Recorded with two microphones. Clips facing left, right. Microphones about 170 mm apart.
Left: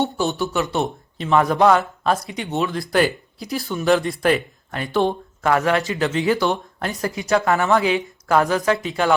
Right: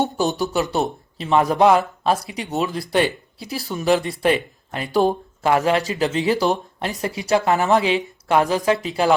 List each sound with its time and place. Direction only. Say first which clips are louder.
0.3 s speech: right 1 dB; 35° right (ahead or behind)
3.8 s speech: left 1 dB; centre (ahead or behind)
4.2 s speech: even; 30° right (ahead or behind)
5.8 s speech: even; 35° right (ahead or behind)